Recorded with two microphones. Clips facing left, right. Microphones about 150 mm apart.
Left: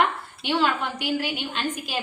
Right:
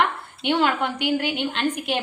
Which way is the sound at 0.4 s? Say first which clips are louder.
Right 3 dB; 60° right (ahead or behind).